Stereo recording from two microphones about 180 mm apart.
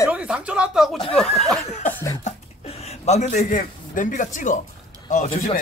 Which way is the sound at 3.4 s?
45° left (ahead or behind).